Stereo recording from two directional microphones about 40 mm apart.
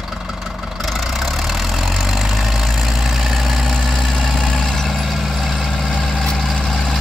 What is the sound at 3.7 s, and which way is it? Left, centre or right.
Vehicle, centre.